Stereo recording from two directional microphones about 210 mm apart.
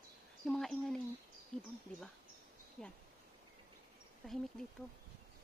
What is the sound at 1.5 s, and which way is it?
Speech, 35° left (ahead or behind).